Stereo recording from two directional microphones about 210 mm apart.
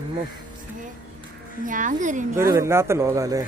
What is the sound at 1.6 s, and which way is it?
Speech, 40° right (ahead or behind).